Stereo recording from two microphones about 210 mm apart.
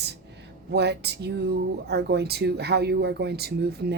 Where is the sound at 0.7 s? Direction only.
50° right (ahead or behind).